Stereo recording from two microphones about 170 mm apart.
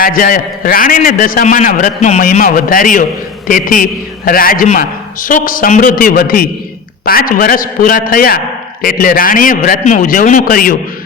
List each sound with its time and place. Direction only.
0.0 s a man's voice: 55° left (ahead or behind)